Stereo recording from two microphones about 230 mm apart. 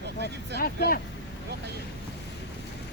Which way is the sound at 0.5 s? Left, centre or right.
Left.